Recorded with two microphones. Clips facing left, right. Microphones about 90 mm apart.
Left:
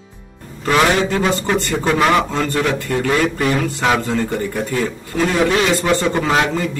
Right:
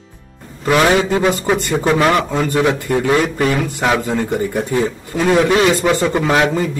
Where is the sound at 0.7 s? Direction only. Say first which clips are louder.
Right 2 dB; 15° right (ahead or behind).